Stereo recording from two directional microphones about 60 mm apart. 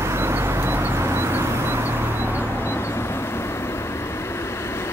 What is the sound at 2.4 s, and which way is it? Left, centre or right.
Vehicle, left.